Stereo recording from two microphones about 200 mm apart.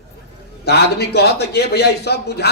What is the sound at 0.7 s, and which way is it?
Speech, 55° left (ahead or behind).